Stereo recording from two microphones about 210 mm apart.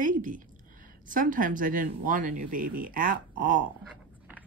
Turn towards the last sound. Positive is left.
turn(degrees=-40)  # may be behind; listen again after turning